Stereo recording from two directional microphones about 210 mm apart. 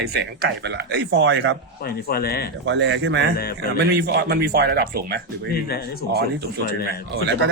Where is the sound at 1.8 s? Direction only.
45° left (ahead or behind).